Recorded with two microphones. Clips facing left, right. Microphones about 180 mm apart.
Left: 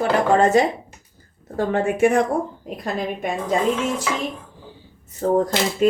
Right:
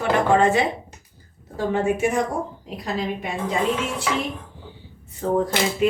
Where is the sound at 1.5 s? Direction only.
55° left (ahead or behind).